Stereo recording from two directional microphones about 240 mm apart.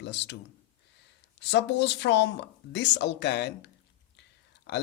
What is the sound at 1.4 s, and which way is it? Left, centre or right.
Speech, left.